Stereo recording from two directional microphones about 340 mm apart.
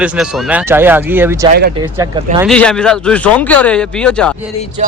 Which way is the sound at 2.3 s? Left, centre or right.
Centre.